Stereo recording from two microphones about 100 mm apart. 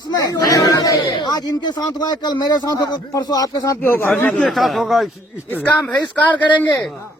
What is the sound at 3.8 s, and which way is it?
Speech, 20° left (ahead or behind).